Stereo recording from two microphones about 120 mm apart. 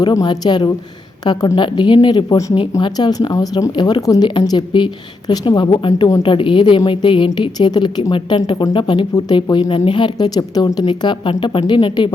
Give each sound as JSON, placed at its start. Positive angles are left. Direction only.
{"t": 0.0, "sound": "a woman's voice", "side_deg": 35}